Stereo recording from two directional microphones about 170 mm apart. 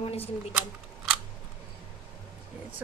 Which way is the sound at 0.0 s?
35° left (ahead or behind).